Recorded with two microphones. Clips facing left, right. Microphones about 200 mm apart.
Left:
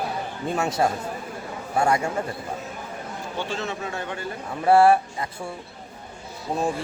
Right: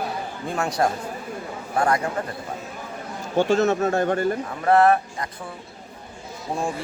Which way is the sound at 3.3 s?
45° right (ahead or behind).